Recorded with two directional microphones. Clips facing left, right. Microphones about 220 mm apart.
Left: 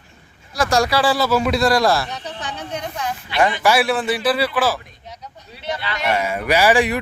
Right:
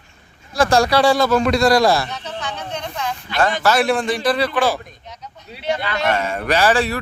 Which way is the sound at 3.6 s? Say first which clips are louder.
Right 1 dB; 10° left (ahead or behind).